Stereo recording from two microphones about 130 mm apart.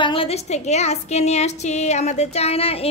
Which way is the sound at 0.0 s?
45° left (ahead or behind).